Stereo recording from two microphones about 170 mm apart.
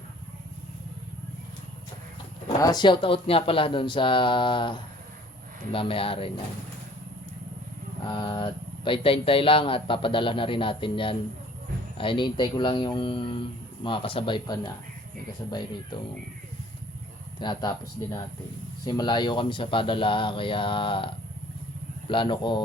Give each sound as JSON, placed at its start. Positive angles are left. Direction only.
{"t": 2.6, "sound": "speech", "side_deg": 25}
{"t": 8.0, "sound": "speech", "side_deg": 30}
{"t": 17.4, "sound": "speech", "side_deg": 25}